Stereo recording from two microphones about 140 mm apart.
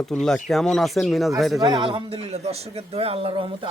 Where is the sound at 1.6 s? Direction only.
35° right (ahead or behind).